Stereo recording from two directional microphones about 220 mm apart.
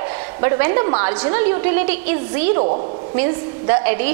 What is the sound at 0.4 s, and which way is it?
A woman's voice, 20° right (ahead or behind).